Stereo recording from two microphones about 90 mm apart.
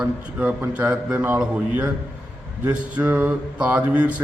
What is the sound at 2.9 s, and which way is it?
A man's voice, 15° right (ahead or behind).